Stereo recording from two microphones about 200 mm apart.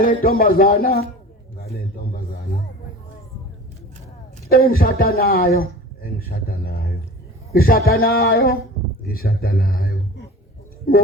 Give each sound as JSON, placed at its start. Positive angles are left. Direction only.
{"t": 0.0, "sound": "speech", "side_deg": 45}
{"t": 4.5, "sound": "a man's voice", "side_deg": 45}